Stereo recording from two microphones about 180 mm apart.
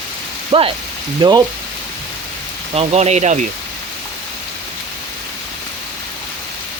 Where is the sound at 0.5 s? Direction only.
30° right (ahead or behind).